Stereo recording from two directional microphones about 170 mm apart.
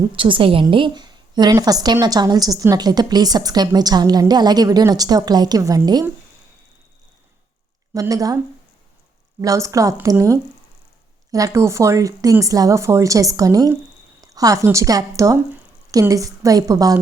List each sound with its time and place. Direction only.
0.2 s a woman's voice: 30° right (ahead or behind)
7.9 s a woman's voice: 20° right (ahead or behind)
9.4 s a woman's voice: 20° right (ahead or behind)